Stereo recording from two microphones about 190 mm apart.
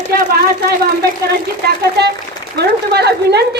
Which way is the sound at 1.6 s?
60° right (ahead or behind).